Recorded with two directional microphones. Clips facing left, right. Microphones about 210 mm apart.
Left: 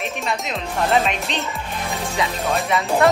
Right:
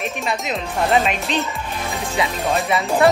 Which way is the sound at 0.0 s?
Centre (ahead or behind).